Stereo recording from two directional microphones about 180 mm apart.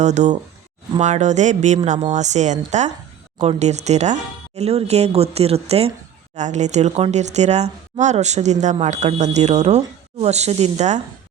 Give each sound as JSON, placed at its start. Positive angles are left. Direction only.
{"t": 0.0, "sound": "speech", "side_deg": -40}